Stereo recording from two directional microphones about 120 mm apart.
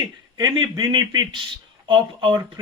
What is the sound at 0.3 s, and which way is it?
A man's voice, 35° right (ahead or behind).